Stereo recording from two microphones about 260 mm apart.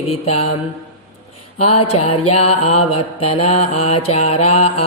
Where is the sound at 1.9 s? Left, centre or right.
Left.